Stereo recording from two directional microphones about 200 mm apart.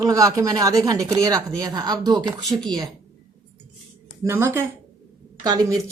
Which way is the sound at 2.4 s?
Centre (ahead or behind).